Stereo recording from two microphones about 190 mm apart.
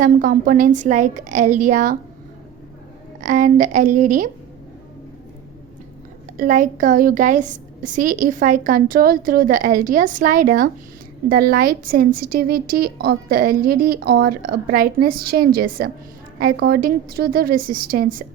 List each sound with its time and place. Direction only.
0.0 s a woman's voice: 45° right (ahead or behind)
3.2 s a woman's voice: 40° right (ahead or behind)
6.3 s a woman's voice: 45° right (ahead or behind)